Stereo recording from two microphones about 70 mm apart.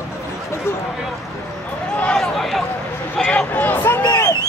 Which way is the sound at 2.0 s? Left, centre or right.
Centre.